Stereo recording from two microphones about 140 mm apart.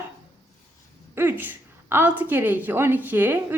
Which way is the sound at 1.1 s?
15° right (ahead or behind).